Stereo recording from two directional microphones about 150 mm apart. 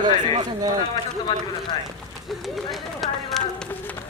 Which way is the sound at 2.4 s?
Centre (ahead or behind).